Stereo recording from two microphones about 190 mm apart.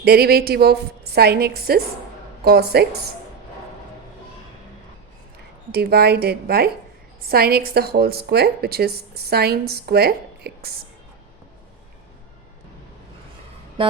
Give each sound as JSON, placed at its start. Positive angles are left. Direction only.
{"t": 0.0, "sound": "a woman's voice", "side_deg": -55}
{"t": 5.7, "sound": "a woman's voice", "side_deg": -55}